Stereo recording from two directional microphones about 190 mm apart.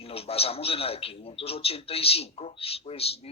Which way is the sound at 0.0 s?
30° left (ahead or behind).